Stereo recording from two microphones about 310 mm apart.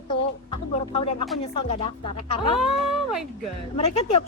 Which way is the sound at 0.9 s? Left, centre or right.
Centre.